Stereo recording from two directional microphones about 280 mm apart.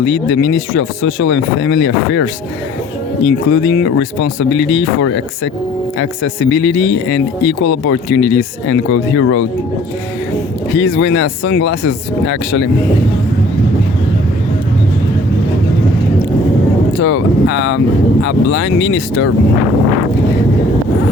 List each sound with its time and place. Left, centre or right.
0.0 s speech: left
10.8 s speech: left
17.0 s a sound: left
18.2 s speech: left